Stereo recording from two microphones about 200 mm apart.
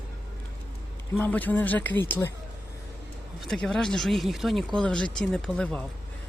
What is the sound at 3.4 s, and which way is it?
Speech, centre (ahead or behind).